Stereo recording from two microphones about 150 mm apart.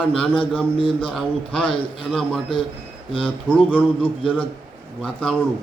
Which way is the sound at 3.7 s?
10° left (ahead or behind).